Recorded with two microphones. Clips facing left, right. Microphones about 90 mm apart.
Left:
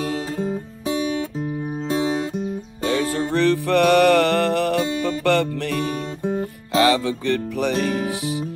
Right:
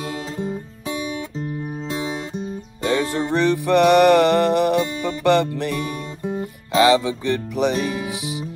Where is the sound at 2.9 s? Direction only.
25° right (ahead or behind).